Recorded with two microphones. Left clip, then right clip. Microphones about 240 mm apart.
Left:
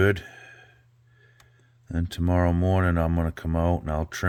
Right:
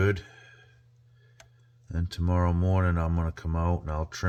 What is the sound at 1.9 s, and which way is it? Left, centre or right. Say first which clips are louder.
Speech: left 5 dB; left.